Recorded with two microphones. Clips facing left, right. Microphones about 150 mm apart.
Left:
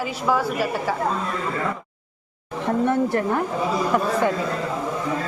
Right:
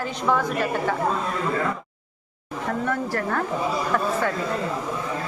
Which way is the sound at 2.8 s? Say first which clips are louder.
Left 6 dB; 20° left (ahead or behind).